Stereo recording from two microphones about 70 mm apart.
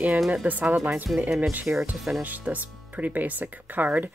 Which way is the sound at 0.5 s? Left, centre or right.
Right.